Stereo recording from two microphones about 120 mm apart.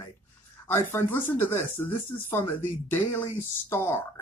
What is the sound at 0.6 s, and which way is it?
Speech, 20° left (ahead or behind).